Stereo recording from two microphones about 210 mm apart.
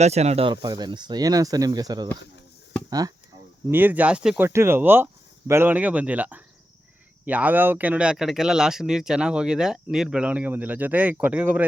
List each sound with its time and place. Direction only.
0.0 s speech: 30° right (ahead or behind)
3.7 s speech: 10° right (ahead or behind)